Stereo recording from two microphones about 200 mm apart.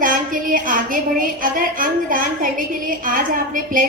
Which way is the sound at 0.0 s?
45° right (ahead or behind).